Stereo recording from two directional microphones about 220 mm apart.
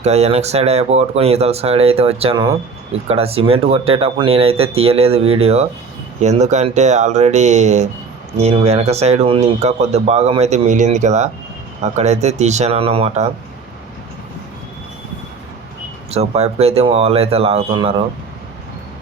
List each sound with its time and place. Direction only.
0.0 s speech: 30° right (ahead or behind)
16.1 s speech: 30° right (ahead or behind)